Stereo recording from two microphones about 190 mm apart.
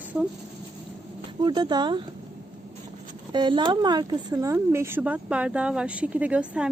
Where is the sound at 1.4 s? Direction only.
20° right (ahead or behind).